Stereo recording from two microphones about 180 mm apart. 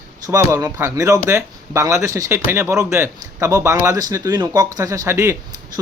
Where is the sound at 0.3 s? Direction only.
15° right (ahead or behind).